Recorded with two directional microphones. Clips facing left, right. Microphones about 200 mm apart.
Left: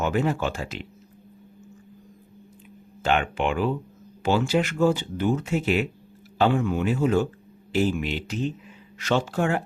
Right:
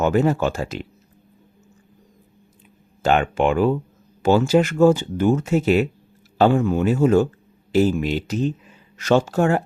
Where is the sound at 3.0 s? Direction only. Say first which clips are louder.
Right 5 dB; 40° right (ahead or behind).